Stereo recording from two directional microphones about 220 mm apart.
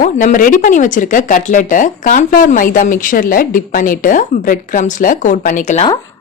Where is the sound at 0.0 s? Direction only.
35° left (ahead or behind).